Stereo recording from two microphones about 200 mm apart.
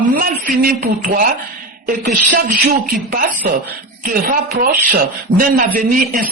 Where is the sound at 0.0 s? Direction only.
45° right (ahead or behind).